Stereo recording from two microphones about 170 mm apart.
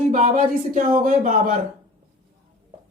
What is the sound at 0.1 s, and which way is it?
Speech, 45° right (ahead or behind).